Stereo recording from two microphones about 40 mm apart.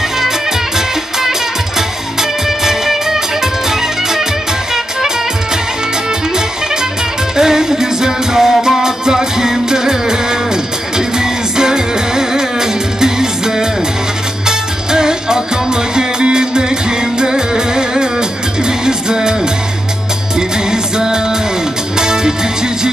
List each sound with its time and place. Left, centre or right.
1.8 s music: centre
6.3 s music: centre
20.3 s music: centre